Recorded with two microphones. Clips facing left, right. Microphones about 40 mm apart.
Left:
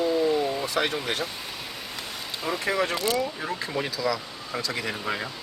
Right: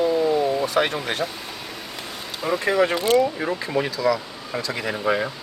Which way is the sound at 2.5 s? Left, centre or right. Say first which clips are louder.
Right 6 dB; centre.